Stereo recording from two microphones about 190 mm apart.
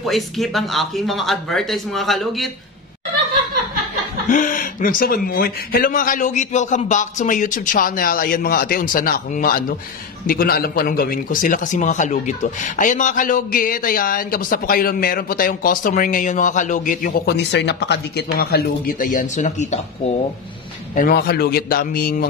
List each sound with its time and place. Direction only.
0.0 s speech: centre (ahead or behind)
4.3 s a man's voice: 45° left (ahead or behind)
20.9 s a man's voice: 50° left (ahead or behind)